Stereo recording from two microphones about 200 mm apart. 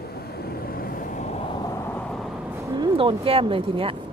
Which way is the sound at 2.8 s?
25° right (ahead or behind).